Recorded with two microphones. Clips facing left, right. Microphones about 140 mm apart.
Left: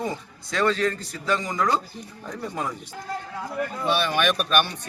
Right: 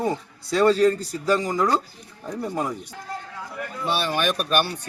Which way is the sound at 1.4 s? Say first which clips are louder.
Right 3 dB; 5° right (ahead or behind).